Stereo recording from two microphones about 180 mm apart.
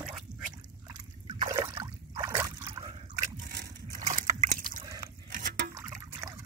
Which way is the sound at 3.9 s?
40° right (ahead or behind).